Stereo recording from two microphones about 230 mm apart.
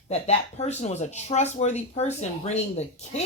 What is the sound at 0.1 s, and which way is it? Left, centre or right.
A woman's voice, left.